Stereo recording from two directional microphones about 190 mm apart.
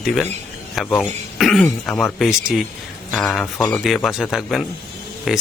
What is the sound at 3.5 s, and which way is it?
Speech, 15° left (ahead or behind).